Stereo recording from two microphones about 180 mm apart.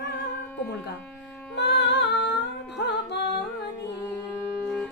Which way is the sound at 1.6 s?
75° left (ahead or behind).